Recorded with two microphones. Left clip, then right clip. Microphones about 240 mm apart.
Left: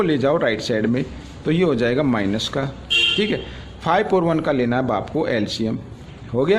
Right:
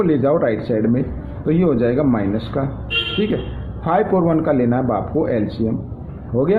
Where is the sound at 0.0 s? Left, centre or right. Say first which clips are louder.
Right 2 dB; left.